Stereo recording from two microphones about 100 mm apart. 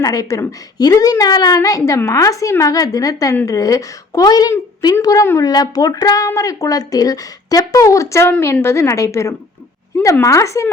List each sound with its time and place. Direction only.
0.0 s a woman's voice: 35° left (ahead or behind)